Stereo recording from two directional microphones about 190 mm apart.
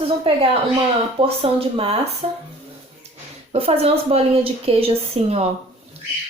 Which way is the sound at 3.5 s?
30° right (ahead or behind).